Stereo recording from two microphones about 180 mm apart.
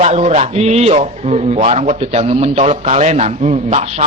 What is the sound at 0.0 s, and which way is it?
A man's voice, 35° right (ahead or behind).